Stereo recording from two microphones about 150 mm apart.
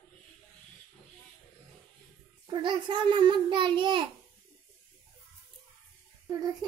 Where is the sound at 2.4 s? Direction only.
30° right (ahead or behind).